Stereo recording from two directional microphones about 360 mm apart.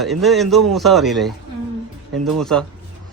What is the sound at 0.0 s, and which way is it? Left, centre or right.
Speech, centre.